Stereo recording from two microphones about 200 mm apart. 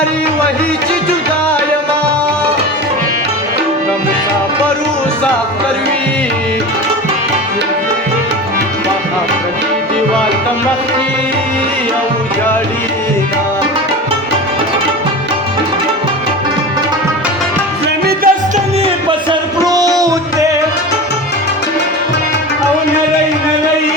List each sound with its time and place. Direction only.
18.0 s music: 45° right (ahead or behind)
19.3 s music: 20° right (ahead or behind)